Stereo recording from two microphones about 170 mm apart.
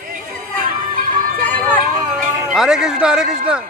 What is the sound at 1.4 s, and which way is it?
Run, 10° left (ahead or behind).